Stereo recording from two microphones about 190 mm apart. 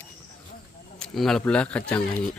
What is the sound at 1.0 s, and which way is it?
Speech, centre (ahead or behind).